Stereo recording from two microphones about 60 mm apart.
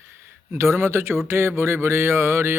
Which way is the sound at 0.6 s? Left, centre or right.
Right.